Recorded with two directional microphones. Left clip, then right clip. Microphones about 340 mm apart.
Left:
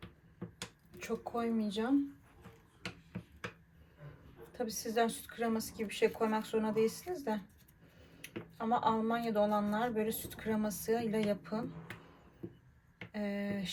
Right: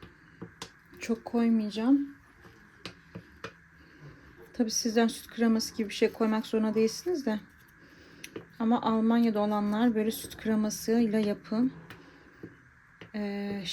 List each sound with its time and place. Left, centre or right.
0.9 s speech: right
4.5 s speech: right
13.1 s a sound: right